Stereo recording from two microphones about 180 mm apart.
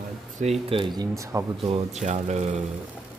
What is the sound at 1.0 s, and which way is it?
Speech, 15° right (ahead or behind).